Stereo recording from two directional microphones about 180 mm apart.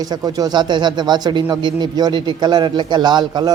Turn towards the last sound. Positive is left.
turn(degrees=-25)  # may be behind; listen again after turning